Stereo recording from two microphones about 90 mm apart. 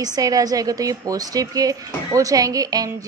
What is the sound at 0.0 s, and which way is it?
A woman's voice, 45° right (ahead or behind).